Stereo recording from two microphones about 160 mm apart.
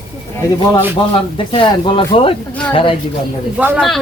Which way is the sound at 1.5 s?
30° left (ahead or behind).